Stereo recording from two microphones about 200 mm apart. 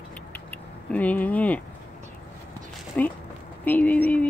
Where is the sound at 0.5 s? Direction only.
5° left (ahead or behind).